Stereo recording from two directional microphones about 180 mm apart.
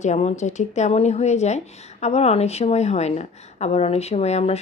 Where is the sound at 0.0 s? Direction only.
40° left (ahead or behind).